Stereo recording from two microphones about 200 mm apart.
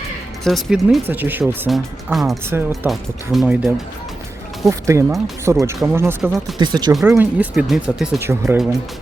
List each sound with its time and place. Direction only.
0.4 s speech: centre (ahead or behind)
2.5 s speech: 10° right (ahead or behind)
4.9 s speech: 15° right (ahead or behind)
6.9 s speech: 5° right (ahead or behind)